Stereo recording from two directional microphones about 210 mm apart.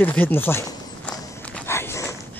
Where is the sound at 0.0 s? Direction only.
10° left (ahead or behind).